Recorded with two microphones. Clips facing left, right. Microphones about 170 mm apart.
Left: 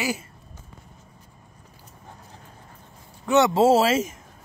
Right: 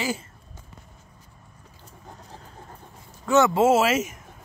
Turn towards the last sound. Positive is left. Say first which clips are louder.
# left 1 dB
turn(degrees=30)  # may be behind; listen again after turning